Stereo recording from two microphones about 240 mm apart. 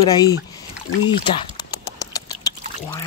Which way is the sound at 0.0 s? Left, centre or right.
Centre.